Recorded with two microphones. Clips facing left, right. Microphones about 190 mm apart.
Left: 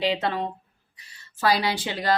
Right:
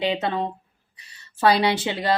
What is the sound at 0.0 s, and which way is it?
Speech, 25° right (ahead or behind).